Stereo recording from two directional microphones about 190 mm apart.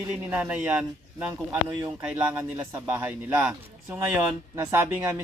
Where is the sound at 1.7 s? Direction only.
25° right (ahead or behind).